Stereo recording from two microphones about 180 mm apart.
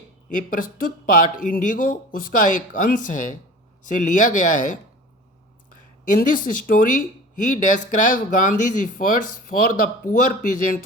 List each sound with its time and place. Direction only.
0.3 s speech: 50° left (ahead or behind)
6.1 s speech: 50° left (ahead or behind)